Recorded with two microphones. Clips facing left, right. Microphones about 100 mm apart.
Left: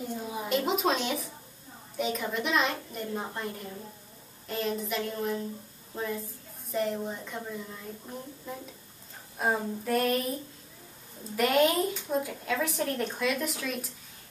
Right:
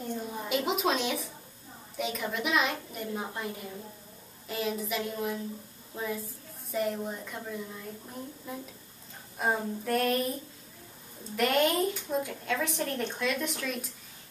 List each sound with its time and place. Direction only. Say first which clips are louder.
0.1 s a woman's voice: left 1 dB; 5° left (ahead or behind)